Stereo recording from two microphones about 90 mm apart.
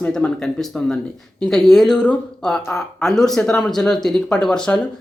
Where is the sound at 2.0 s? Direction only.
15° left (ahead or behind).